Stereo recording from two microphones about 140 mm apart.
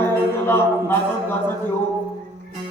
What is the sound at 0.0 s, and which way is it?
Music, 15° left (ahead or behind).